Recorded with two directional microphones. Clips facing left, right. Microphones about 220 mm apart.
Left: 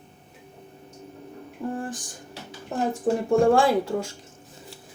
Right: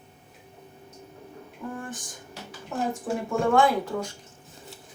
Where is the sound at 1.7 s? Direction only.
30° left (ahead or behind).